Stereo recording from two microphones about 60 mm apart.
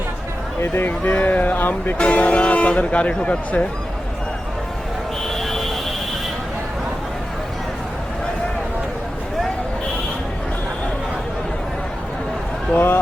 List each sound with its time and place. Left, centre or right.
0.9 s speech: left
2.0 s speech: left
5.3 s a sound: centre
12.7 s speech: left